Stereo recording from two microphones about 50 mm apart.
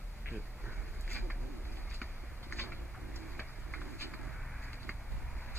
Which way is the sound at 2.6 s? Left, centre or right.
Left.